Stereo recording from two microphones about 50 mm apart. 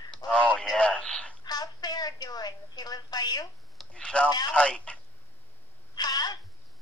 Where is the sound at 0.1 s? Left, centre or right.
Left.